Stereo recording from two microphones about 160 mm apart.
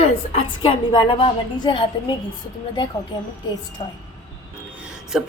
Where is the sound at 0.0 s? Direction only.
40° left (ahead or behind).